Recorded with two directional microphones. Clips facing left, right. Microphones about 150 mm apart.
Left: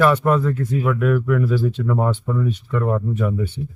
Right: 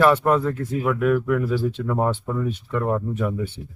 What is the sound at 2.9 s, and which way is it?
Speech, 10° right (ahead or behind).